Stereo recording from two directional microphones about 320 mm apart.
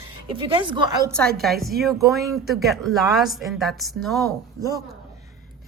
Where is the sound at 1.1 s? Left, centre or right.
Centre.